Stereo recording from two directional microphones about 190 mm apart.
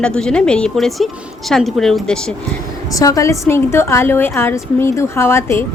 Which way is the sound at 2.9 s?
20° left (ahead or behind).